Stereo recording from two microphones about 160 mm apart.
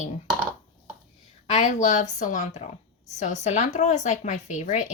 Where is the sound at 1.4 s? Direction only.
45° left (ahead or behind).